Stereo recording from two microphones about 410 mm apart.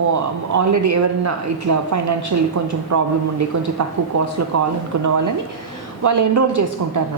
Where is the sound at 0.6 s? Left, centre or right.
Right.